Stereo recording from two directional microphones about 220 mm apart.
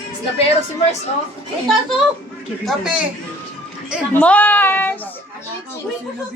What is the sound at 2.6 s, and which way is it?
Speech, 5° right (ahead or behind).